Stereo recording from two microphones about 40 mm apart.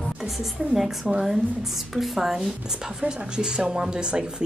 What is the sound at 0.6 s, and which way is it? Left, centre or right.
Speech, centre.